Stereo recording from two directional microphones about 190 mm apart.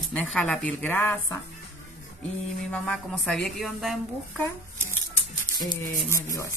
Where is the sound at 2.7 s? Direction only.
5° left (ahead or behind).